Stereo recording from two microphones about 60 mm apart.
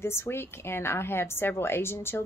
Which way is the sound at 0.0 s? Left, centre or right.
Left.